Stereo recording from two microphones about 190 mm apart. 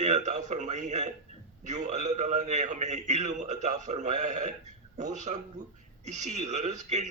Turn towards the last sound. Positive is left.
turn(degrees=-40)  # may be behind; listen again after turning